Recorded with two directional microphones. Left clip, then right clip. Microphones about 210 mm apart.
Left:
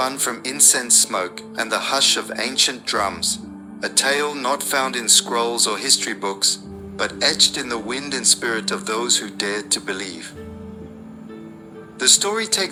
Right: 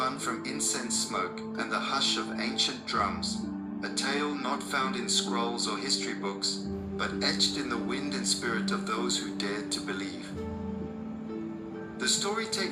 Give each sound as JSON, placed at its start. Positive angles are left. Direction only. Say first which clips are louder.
{"t": 0.0, "sound": "speech", "louder": "left 8 dB", "side_deg": 55}
{"t": 11.9, "sound": "speech", "louder": "left 12 dB", "side_deg": 55}